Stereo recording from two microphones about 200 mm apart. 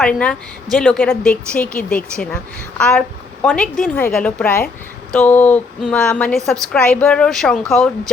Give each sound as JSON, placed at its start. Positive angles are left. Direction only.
{"t": 0.0, "sound": "a woman's voice", "side_deg": 5}